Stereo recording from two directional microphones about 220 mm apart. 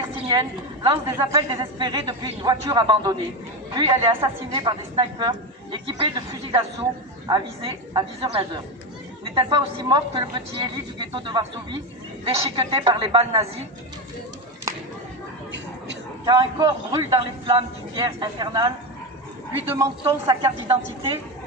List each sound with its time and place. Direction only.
0.3 s a woman's voice: 20° right (ahead or behind)
16.2 s a woman's voice: 20° right (ahead or behind)